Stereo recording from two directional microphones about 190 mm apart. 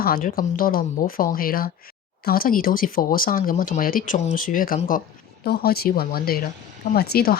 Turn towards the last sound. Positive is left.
turn(degrees=55)  # may be behind; listen again after turning